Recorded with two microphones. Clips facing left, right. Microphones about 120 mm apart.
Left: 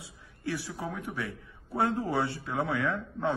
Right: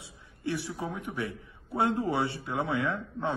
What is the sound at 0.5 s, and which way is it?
Speech, centre (ahead or behind).